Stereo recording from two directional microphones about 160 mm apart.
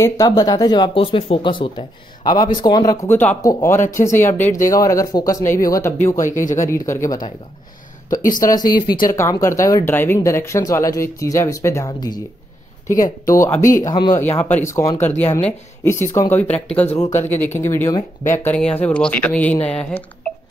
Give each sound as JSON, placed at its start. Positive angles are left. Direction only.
{"t": 0.0, "sound": "speech", "side_deg": 25}
{"t": 6.1, "sound": "speech", "side_deg": 55}
{"t": 6.9, "sound": "speech", "side_deg": 20}
{"t": 8.1, "sound": "speech", "side_deg": 60}
{"t": 8.5, "sound": "speech", "side_deg": 25}
{"t": 13.3, "sound": "speech", "side_deg": 20}
{"t": 14.2, "sound": "speech", "side_deg": 15}
{"t": 17.1, "sound": "speech", "side_deg": 45}
{"t": 17.4, "sound": "speech", "side_deg": 15}